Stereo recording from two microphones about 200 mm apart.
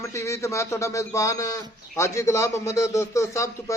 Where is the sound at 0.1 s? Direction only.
15° left (ahead or behind).